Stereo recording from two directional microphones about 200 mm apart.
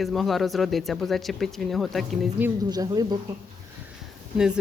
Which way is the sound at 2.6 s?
20° right (ahead or behind).